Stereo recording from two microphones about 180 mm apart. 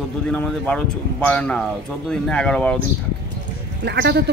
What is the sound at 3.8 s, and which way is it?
Speech, 60° right (ahead or behind).